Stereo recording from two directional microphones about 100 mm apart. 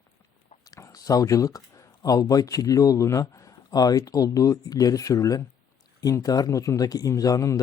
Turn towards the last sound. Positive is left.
turn(degrees=35)  # may be behind; listen again after turning